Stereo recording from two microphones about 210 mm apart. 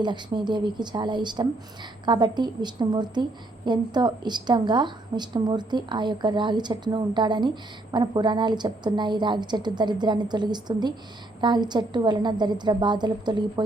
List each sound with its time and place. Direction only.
0.0 s a woman's voice: 20° right (ahead or behind)